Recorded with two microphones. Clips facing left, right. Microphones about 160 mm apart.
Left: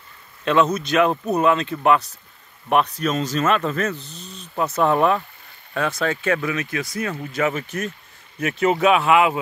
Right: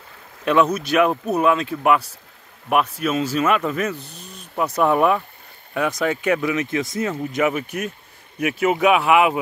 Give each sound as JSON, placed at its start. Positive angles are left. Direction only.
{"t": 0.5, "sound": "speech", "side_deg": -10}